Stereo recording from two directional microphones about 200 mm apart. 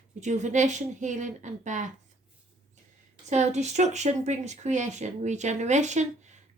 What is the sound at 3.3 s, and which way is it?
A woman's voice, 35° right (ahead or behind).